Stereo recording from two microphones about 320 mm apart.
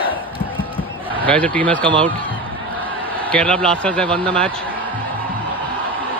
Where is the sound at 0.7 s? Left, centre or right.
Centre.